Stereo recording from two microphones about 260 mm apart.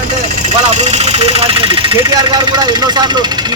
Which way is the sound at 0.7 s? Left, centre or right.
Right.